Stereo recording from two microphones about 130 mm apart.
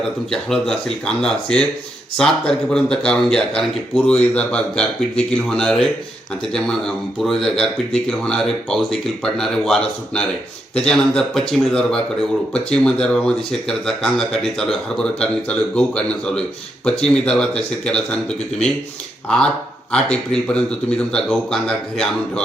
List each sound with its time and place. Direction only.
0.3 s speech: 5° left (ahead or behind)
19.9 s speech: 5° left (ahead or behind)